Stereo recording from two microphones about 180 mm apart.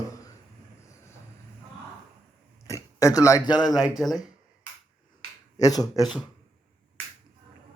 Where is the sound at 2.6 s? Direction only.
20° left (ahead or behind).